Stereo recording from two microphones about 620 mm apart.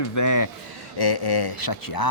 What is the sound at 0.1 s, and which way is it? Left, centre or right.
Speech, left.